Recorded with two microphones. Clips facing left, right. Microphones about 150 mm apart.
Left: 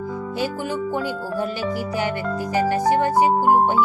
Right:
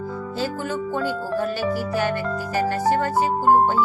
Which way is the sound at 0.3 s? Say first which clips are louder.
Left 1 dB; 15° left (ahead or behind).